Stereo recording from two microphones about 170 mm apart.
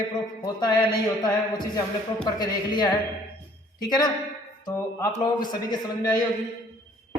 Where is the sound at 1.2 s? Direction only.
25° left (ahead or behind).